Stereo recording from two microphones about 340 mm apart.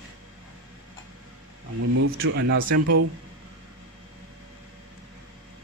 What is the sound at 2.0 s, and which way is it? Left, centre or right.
Speech, right.